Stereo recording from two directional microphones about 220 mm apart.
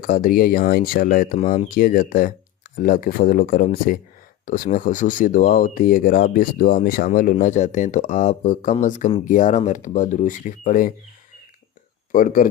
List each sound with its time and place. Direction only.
0.0 s speech: 40° left (ahead or behind)
12.1 s speech: 40° left (ahead or behind)